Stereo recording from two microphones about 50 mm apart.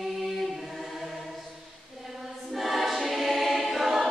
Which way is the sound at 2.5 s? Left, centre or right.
Centre.